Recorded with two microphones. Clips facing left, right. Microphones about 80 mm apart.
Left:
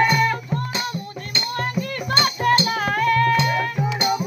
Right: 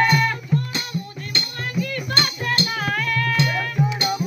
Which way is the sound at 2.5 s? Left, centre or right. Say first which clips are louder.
Left 4 dB; left.